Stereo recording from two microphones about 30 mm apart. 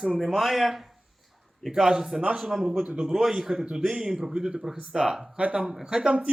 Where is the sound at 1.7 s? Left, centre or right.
Right.